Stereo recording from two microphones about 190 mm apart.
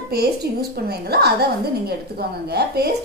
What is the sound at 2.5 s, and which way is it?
Speech, 60° right (ahead or behind).